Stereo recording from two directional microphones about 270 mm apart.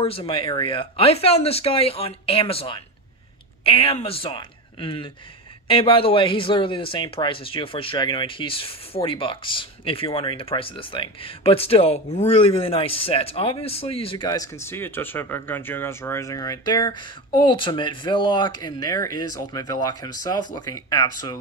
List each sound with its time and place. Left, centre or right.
0.0 s speech: left